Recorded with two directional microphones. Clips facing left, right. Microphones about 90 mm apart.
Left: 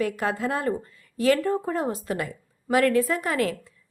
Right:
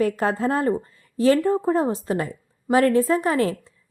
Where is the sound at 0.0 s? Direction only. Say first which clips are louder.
Right 4 dB; 35° right (ahead or behind).